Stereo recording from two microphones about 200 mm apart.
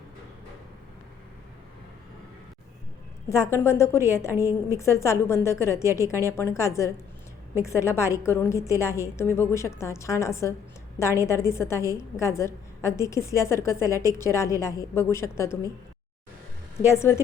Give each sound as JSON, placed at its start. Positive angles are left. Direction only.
{"t": 3.2, "sound": "a woman's voice", "side_deg": 15}
{"t": 4.3, "sound": "a woman's voice", "side_deg": -10}
{"t": 4.7, "sound": "a woman's voice", "side_deg": 15}
{"t": 16.9, "sound": "a woman's voice", "side_deg": 15}